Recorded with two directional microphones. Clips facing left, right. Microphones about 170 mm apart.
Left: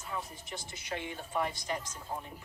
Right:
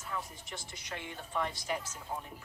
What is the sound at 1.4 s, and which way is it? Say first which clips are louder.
Speech: left 1 dB; centre (ahead or behind).